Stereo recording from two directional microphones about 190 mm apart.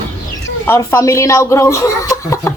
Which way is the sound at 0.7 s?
15° left (ahead or behind).